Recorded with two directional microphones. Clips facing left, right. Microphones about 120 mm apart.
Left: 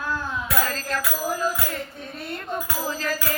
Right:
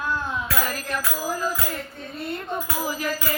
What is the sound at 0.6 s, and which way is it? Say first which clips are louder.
Music: left 1 dB; 15° right (ahead or behind).